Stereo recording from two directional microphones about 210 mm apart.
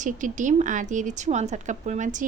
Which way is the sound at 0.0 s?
35° right (ahead or behind).